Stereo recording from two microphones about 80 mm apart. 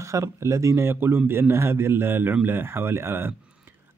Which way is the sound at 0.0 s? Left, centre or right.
Right.